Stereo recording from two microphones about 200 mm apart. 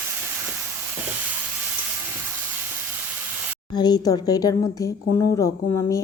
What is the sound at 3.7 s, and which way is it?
A woman's voice, 20° left (ahead or behind).